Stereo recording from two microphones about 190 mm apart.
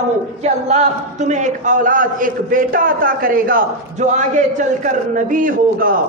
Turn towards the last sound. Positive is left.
turn(degrees=-45)  # may be behind; listen again after turning